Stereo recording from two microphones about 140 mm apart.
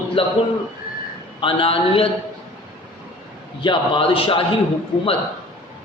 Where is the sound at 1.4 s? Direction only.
40° left (ahead or behind).